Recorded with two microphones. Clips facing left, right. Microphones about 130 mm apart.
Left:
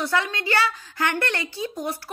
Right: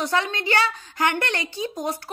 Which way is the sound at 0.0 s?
20° right (ahead or behind).